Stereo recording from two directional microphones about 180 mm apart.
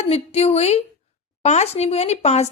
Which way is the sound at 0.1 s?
35° left (ahead or behind).